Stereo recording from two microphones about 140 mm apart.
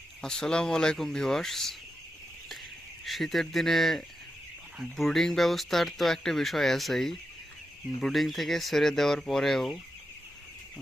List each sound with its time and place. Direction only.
0.2 s speech: 5° left (ahead or behind)
3.0 s speech: centre (ahead or behind)